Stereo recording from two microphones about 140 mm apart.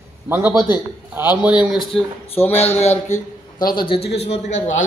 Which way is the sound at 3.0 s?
60° left (ahead or behind).